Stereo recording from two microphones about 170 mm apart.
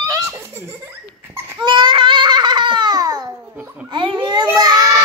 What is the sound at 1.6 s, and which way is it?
Babbling, 25° right (ahead or behind).